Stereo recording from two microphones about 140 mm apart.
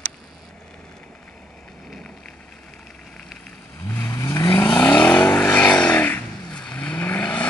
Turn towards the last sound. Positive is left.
turn(degrees=10)  # may be behind; listen again after turning